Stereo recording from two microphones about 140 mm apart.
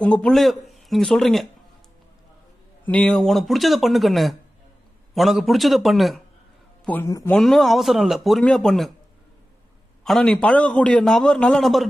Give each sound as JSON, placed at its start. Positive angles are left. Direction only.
{"t": 0.0, "sound": "speech", "side_deg": 5}
{"t": 2.8, "sound": "a man's voice", "side_deg": 10}
{"t": 6.8, "sound": "a sound", "side_deg": 10}
{"t": 7.2, "sound": "a man's voice", "side_deg": 0}
{"t": 10.0, "sound": "a man's voice", "side_deg": 5}